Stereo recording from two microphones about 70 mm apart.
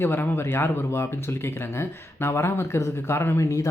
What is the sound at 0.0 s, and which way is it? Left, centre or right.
Speech, left.